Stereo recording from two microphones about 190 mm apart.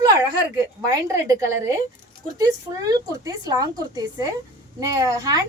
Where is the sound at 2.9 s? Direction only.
20° right (ahead or behind).